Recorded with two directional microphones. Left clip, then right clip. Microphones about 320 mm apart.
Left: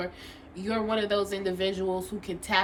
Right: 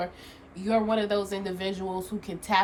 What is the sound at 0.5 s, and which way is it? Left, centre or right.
Speech, centre.